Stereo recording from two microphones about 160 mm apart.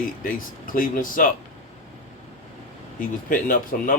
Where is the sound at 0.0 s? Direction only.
60° left (ahead or behind).